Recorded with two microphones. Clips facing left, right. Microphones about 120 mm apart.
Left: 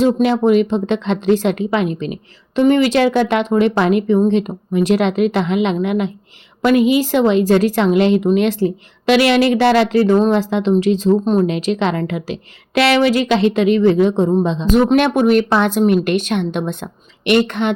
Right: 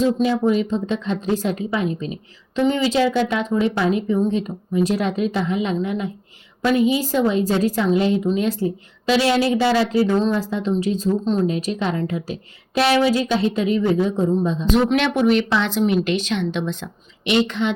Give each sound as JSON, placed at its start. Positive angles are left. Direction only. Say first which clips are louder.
{"t": 0.0, "sound": "a woman's voice", "louder": "left 4 dB", "side_deg": 70}
{"t": 2.6, "sound": "a woman's voice", "louder": "left 5 dB", "side_deg": 65}
{"t": 14.9, "sound": "a woman's voice", "louder": "left 5 dB", "side_deg": 50}